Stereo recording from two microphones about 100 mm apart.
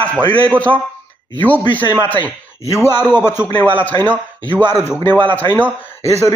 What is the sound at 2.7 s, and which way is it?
A man's voice, 25° left (ahead or behind).